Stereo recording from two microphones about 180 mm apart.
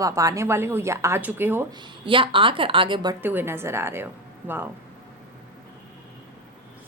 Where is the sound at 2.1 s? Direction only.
30° right (ahead or behind).